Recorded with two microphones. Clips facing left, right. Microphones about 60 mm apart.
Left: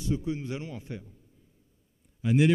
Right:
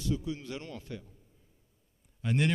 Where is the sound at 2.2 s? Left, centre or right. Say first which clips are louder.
Left 6 dB; centre.